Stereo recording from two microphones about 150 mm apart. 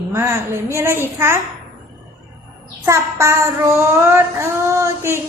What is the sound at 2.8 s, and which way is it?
Child singing, 20° right (ahead or behind).